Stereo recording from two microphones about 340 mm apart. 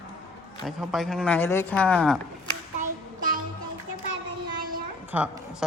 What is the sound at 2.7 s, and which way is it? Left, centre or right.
Child singing, right.